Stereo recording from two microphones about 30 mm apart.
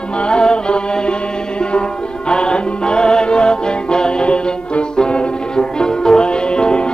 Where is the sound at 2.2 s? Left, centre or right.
Left.